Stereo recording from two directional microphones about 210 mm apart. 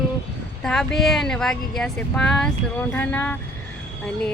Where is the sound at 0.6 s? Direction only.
Centre (ahead or behind).